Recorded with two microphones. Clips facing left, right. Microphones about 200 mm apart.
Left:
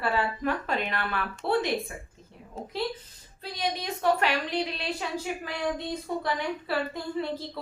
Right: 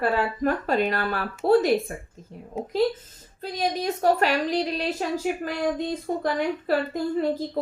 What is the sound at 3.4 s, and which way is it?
A woman's voice, 45° right (ahead or behind).